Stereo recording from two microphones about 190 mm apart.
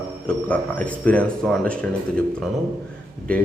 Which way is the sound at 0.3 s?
5° left (ahead or behind).